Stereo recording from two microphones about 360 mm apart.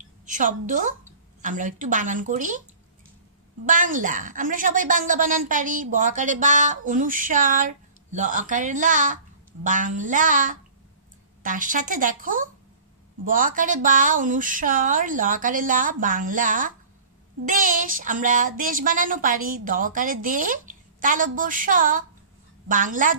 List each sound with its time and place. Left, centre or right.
0.2 s a woman's voice: right
3.6 s a woman's voice: right